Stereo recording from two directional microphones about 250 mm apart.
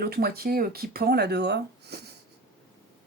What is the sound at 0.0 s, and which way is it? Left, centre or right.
Speech, right.